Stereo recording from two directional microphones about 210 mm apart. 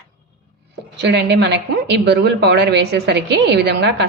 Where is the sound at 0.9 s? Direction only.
55° right (ahead or behind).